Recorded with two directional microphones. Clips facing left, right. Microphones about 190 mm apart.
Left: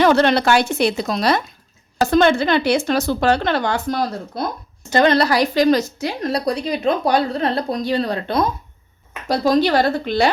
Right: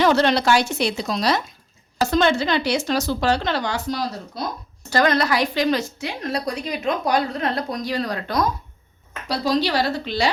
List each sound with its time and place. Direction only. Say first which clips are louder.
0.0 s a woman's voice: left 3 dB; 55° left (ahead or behind)
4.9 s a woman's voice: left 4 dB; 25° left (ahead or behind)
9.2 s a woman's voice: left 5 dB; 50° left (ahead or behind)